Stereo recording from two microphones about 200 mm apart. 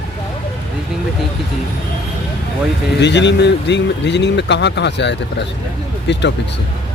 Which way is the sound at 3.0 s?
60° left (ahead or behind).